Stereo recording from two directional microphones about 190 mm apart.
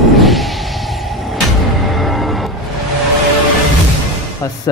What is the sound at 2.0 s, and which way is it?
Music, centre (ahead or behind).